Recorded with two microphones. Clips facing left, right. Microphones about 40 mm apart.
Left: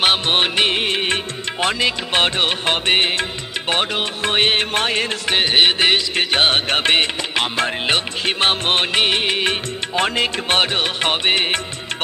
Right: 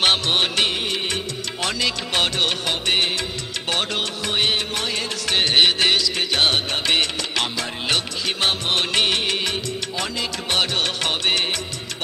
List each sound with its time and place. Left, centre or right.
0.3 s music: left
0.7 s music: left
3.7 s music: left
4.2 s music: left
5.2 s music: left
7.5 s music: left
9.5 s music: left